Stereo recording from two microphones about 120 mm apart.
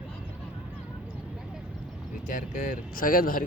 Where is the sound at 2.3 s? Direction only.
90° left.